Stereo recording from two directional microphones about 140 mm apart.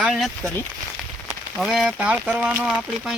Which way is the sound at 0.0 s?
Centre (ahead or behind).